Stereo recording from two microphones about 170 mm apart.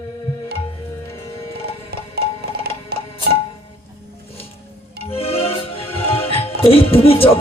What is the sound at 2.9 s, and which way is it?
Music, 65° right (ahead or behind).